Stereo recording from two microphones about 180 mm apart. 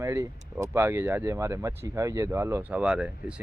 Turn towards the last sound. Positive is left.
turn(degrees=-5)  # may be behind; listen again after turning